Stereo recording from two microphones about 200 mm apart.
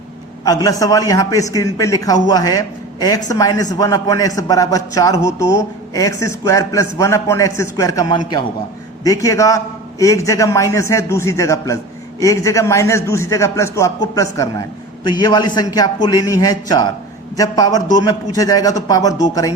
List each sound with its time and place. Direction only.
0.4 s a man's voice: 20° left (ahead or behind)